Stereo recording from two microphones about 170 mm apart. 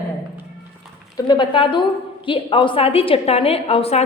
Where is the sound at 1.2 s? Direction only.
25° left (ahead or behind).